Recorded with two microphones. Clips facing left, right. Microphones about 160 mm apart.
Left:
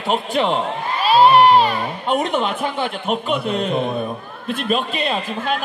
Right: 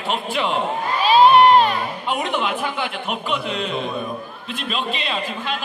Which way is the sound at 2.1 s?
45° left (ahead or behind).